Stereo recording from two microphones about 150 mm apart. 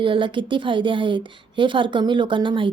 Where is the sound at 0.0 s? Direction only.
35° right (ahead or behind).